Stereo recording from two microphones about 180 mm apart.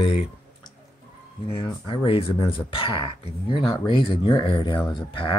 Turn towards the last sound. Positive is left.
turn(degrees=30)  # may be behind; listen again after turning